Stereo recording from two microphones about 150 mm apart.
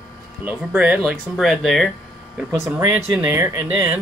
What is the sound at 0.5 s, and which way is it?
Speech, 10° right (ahead or behind).